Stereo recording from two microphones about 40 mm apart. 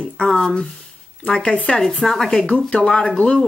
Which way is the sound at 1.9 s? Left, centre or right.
Centre.